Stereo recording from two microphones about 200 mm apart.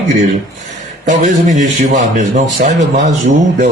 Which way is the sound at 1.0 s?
35° right (ahead or behind).